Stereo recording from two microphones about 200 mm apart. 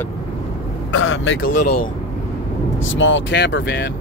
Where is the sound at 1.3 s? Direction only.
50° left (ahead or behind).